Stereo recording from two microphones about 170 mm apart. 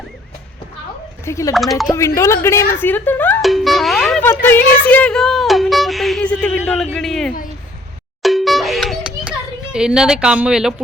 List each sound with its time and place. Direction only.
1.2 s speech: 15° left (ahead or behind)
1.5 s speech: centre (ahead or behind)
1.9 s speech: 15° left (ahead or behind); by 4.3 s centre (ahead or behind)
4.3 s speech: 10° left (ahead or behind)
8.2 s music: centre (ahead or behind)
9.7 s speech: 5° right (ahead or behind)